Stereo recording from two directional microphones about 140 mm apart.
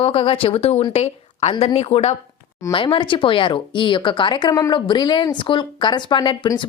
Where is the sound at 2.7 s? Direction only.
35° left (ahead or behind).